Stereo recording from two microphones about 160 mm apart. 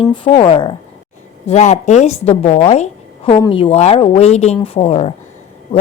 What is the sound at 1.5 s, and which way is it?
A woman's voice, 45° left (ahead or behind).